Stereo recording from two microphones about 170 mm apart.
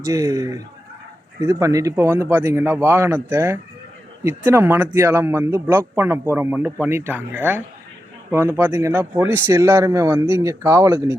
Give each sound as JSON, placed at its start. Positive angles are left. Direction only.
{"t": 0.0, "sound": "speech", "side_deg": -20}